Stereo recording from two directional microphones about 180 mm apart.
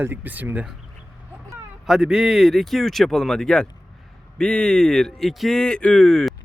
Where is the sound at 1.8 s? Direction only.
5° right (ahead or behind).